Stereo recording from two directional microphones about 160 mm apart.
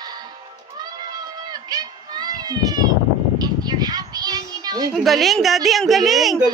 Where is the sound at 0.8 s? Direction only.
25° right (ahead or behind).